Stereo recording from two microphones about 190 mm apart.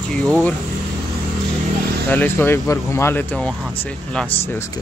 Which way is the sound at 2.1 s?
10° left (ahead or behind).